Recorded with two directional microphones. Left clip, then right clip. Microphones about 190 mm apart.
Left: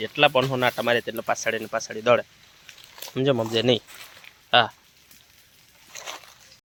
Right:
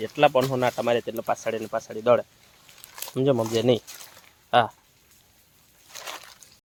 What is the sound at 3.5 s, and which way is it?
Speech, 10° right (ahead or behind).